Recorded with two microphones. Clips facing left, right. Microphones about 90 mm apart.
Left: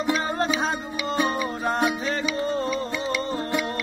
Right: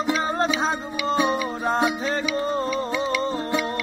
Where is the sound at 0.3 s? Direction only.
25° right (ahead or behind).